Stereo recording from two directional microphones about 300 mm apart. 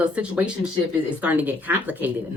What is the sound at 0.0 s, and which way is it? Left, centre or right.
Speech, centre.